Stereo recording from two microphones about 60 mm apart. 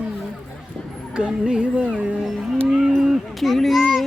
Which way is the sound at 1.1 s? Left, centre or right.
Centre.